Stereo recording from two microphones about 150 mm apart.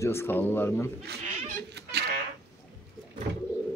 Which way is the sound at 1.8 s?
90° right.